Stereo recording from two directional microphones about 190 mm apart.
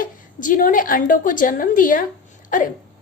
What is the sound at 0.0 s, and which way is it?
A woman's voice, 45° left (ahead or behind).